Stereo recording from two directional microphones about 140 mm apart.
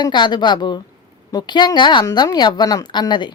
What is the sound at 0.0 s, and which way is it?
A woman's voice, 30° left (ahead or behind).